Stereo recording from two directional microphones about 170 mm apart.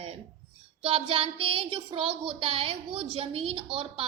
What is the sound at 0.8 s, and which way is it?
Child singing, 35° right (ahead or behind).